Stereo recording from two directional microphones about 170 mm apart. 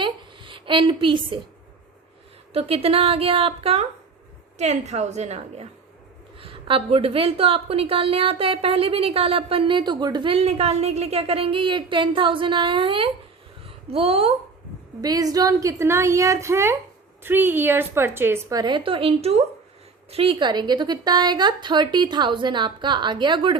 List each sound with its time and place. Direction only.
0.0 s a sound: 30° right (ahead or behind)
2.5 s a woman's voice: 35° right (ahead or behind)
15.0 s a woman's voice: 20° right (ahead or behind)